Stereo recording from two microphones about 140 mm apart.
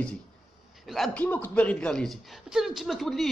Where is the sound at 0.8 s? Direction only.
Centre (ahead or behind).